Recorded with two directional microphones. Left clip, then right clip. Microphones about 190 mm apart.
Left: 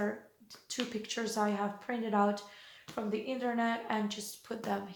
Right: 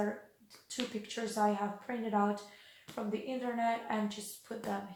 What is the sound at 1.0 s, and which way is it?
Speech, 25° left (ahead or behind).